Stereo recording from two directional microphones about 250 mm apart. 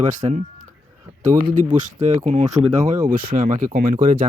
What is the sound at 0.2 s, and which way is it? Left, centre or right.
Speech, centre.